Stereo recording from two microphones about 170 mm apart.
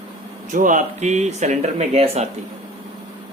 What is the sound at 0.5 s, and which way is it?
Speech, 50° right (ahead or behind).